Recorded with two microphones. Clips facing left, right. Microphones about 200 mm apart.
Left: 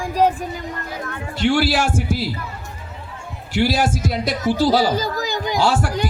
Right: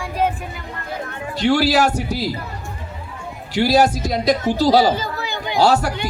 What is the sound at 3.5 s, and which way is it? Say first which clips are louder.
A man's voice: right 3 dB; 40° right (ahead or behind).